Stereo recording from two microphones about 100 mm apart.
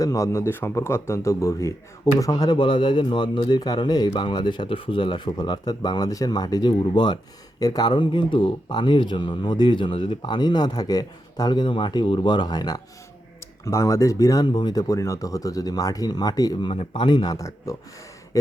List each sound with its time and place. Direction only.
0.0 s a man's voice: 35° left (ahead or behind)
2.3 s speech: 45° left (ahead or behind)
7.6 s speech: 40° left (ahead or behind)
13.7 s speech: 30° left (ahead or behind)
14.4 s speech: 50° left (ahead or behind)
16.6 s speech: 60° left (ahead or behind); by 17.7 s 35° left (ahead or behind)